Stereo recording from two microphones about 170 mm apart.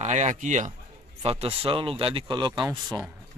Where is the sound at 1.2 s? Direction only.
35° right (ahead or behind).